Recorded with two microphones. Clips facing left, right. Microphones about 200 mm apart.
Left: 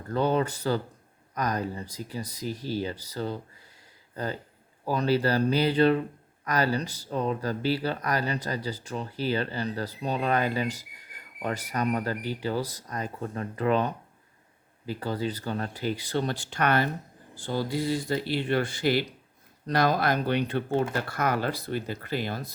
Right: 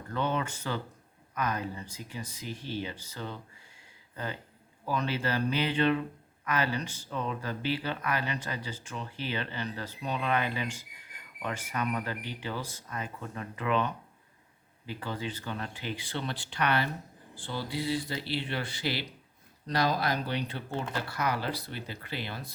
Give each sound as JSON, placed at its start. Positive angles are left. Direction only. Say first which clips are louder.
{"t": 0.1, "sound": "speech", "louder": "left 6 dB", "side_deg": 35}